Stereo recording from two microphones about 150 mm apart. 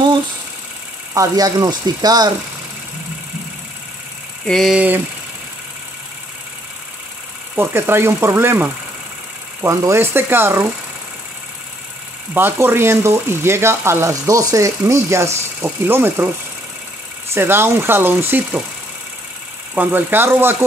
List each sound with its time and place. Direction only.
1.1 s speech: 25° right (ahead or behind)
4.5 s vehicle: centre (ahead or behind)
7.5 s speech: 15° right (ahead or behind)
12.4 s speech: 15° right (ahead or behind)
17.3 s speech: 15° right (ahead or behind)
19.7 s speech: 10° right (ahead or behind)